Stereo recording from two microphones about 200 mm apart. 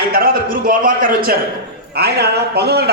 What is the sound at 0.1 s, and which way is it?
A man's voice, 45° right (ahead or behind).